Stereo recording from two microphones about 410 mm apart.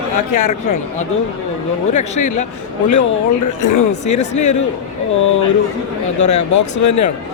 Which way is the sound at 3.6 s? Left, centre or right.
Left.